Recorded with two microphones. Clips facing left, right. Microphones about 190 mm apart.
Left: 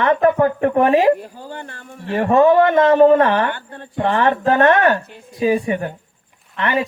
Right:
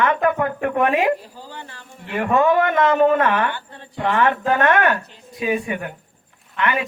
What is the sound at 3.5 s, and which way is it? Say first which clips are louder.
Speech: left 4 dB; 55° left (ahead or behind).